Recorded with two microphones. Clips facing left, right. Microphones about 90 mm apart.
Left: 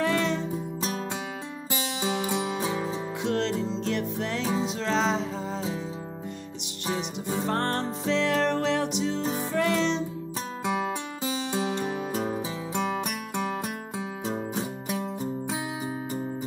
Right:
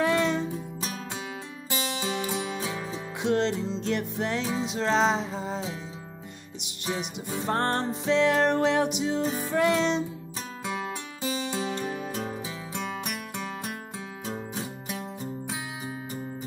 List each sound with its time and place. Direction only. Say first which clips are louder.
0.0 s music: right 1 dB; 5° right (ahead or behind)
2.0 s music: left 5 dB; 15° left (ahead or behind)
2.6 s music: left 4 dB; 25° left (ahead or behind)
3.2 s music: right 3 dB; centre (ahead or behind)
7.4 s music: right 3 dB; 5° right (ahead or behind)
10.6 s music: left 5 dB; 20° left (ahead or behind)